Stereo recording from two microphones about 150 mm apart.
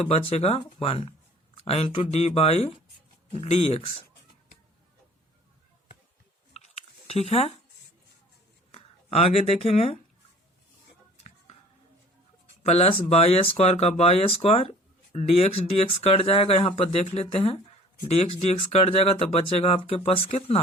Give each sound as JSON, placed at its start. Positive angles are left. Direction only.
{"t": 0.0, "sound": "speech", "side_deg": 40}
{"t": 6.5, "sound": "a sound", "side_deg": 45}
{"t": 8.7, "sound": "speech", "side_deg": 40}
{"t": 12.6, "sound": "speech", "side_deg": 45}